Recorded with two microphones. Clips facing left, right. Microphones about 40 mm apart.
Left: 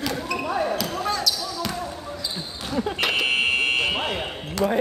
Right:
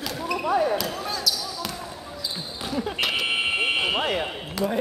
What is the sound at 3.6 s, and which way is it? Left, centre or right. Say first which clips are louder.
Fire alarm: left 1 dB; centre.